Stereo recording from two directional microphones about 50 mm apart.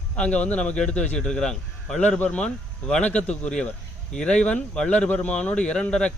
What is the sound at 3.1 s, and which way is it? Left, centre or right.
Speech, left.